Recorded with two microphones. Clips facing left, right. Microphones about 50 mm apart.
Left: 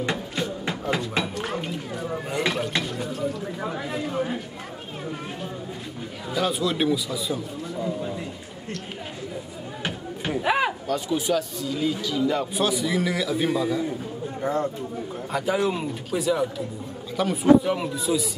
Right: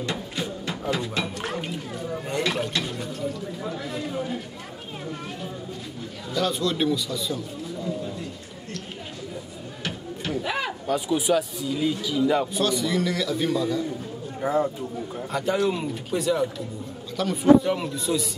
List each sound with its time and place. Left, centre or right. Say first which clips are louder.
0.4 s music: left 2 dB; centre
1.2 s a sound: left 1 dB; centre
3.0 s speech: left 2 dB; centre
3.6 s speech: left 2 dB; left
6.3 s a man's voice: left 1 dB; centre
9.8 s a sound: left 1 dB; left
10.9 s speech: right 1 dB; centre
12.5 s a man's voice: even; centre
14.4 s speech: right 2 dB; centre
15.3 s speech: even; centre